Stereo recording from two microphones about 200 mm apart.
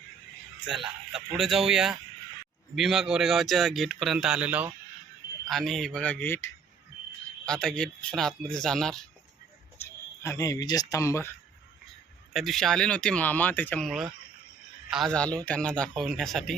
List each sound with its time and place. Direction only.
0.6 s a man's voice: 5° right (ahead or behind); by 11.3 s 15° left (ahead or behind)
12.3 s a man's voice: centre (ahead or behind)